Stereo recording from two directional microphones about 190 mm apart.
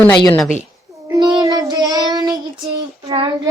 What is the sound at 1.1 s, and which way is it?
Child singing, 20° right (ahead or behind).